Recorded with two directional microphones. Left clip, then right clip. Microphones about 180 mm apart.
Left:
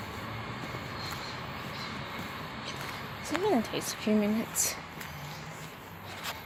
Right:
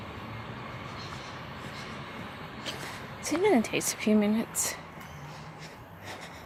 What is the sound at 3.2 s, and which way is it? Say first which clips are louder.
Speech: right 4 dB; 35° right (ahead or behind).